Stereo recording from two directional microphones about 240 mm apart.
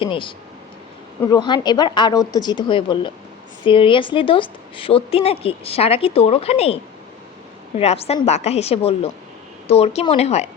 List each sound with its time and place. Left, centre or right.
0.0 s a woman's voice: left
7.8 s a woman's voice: left